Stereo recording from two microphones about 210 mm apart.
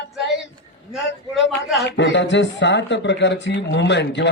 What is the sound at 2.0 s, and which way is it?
Speech, 60° left (ahead or behind).